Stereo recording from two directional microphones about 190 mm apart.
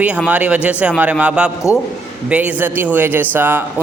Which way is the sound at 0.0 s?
5° right (ahead or behind).